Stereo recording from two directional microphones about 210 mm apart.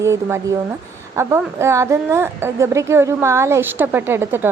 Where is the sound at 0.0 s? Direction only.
15° right (ahead or behind).